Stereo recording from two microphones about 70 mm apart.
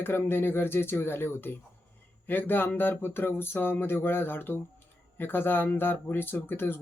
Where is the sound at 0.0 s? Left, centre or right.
Left.